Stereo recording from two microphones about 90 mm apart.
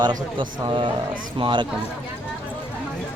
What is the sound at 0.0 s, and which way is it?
Speech, 50° right (ahead or behind).